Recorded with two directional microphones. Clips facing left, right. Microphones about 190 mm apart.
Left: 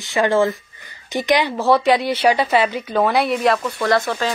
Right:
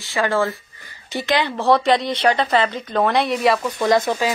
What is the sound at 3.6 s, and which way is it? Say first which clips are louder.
Speech: right 1 dB; 15° right (ahead or behind).